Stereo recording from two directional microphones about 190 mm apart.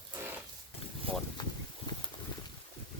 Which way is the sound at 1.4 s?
25° left (ahead or behind).